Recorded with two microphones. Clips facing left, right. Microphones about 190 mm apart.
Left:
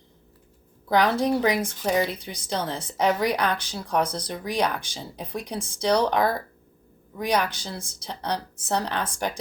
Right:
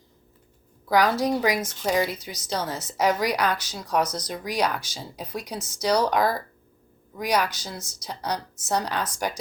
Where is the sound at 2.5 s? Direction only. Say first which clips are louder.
Even; 30° left (ahead or behind).